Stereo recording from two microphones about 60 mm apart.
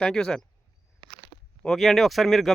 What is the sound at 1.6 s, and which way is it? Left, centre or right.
Speech, centre.